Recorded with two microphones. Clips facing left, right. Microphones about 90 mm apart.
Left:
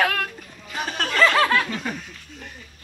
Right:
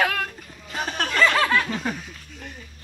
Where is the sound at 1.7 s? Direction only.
15° right (ahead or behind).